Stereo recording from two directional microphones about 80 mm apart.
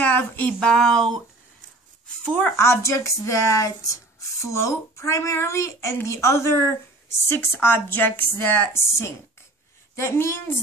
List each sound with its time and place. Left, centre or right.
0.0 s a sound: left
0.5 s speech: centre
2.4 s a woman's voice: left
8.7 s speech: left